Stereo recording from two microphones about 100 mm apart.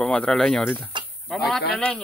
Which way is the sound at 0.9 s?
50° right (ahead or behind).